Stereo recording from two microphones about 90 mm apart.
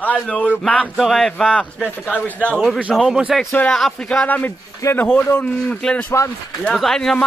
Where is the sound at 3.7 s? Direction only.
5° left (ahead or behind).